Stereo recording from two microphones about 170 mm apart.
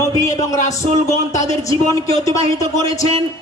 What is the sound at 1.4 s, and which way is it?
A man's voice, 20° left (ahead or behind).